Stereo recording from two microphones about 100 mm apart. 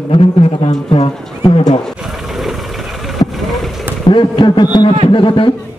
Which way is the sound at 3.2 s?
45° left (ahead or behind).